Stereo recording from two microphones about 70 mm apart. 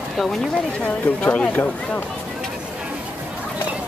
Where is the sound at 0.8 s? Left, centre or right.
Centre.